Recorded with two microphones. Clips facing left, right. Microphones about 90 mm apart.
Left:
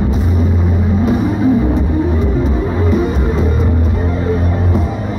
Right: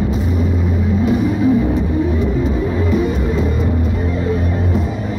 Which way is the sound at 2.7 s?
45° left (ahead or behind).